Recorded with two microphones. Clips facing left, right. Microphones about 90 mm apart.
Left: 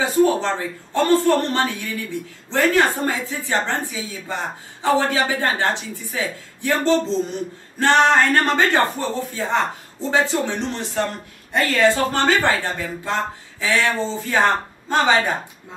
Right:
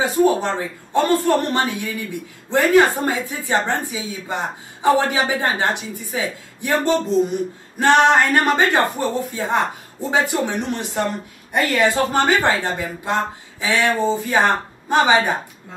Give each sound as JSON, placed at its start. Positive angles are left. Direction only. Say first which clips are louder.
{"t": 0.0, "sound": "a man's voice", "louder": "even", "side_deg": -15}